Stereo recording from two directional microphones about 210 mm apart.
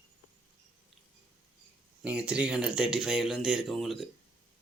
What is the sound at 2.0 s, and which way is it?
Speech, 5° right (ahead or behind).